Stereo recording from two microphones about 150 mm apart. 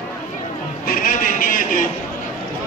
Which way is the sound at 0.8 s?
65° left (ahead or behind).